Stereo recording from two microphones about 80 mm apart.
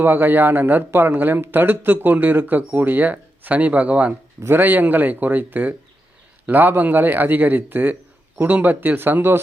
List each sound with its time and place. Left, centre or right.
0.0 s speech: right